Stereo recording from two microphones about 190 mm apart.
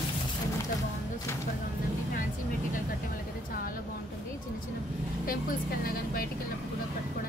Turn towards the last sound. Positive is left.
turn(degrees=50)  # may be behind; listen again after turning